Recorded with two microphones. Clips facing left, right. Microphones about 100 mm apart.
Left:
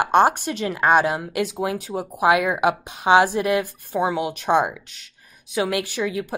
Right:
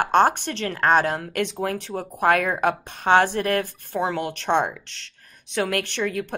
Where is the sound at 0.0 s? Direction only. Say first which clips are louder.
Left 1 dB; 10° left (ahead or behind).